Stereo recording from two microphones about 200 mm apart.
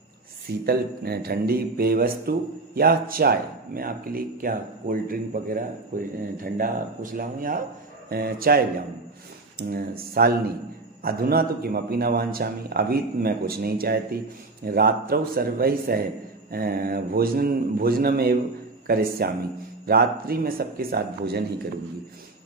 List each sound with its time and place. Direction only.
0.7 s a man's voice: 50° right (ahead or behind)